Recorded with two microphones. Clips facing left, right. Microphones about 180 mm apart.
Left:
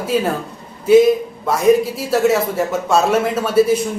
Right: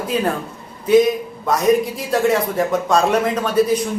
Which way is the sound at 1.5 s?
5° left (ahead or behind).